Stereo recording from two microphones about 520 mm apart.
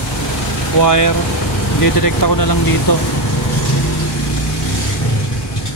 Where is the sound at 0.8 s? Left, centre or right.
Left.